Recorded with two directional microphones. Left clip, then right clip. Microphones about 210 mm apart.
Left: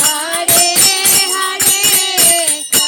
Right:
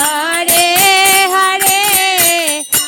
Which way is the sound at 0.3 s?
50° right (ahead or behind).